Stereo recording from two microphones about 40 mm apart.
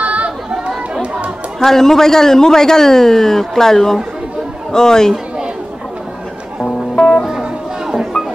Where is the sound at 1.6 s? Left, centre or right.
Centre.